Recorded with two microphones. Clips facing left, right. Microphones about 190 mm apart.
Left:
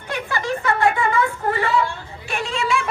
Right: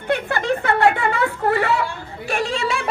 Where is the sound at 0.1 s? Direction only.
55° right (ahead or behind).